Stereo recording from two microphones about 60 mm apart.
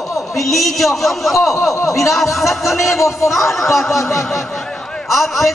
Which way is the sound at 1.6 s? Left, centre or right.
Left.